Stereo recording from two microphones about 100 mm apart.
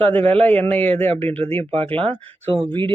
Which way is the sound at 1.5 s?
70° right (ahead or behind).